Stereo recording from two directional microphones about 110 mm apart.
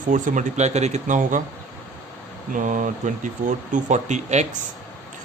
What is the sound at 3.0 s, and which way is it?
Speech, 90° right.